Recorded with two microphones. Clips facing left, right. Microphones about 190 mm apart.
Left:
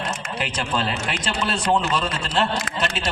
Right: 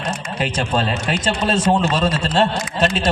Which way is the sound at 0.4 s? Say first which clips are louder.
Right 5 dB; 40° right (ahead or behind).